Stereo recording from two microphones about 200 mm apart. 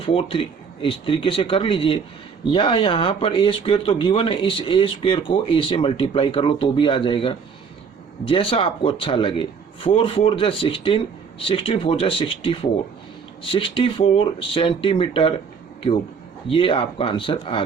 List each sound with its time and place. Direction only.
0.0 s speech: 30° left (ahead or behind)
16.5 s speech: 25° left (ahead or behind)